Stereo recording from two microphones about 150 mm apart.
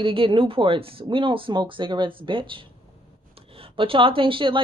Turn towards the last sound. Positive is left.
turn(degrees=-35)  # may be behind; listen again after turning